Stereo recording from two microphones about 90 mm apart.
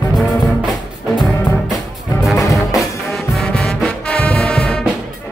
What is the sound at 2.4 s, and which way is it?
Music, 35° left (ahead or behind).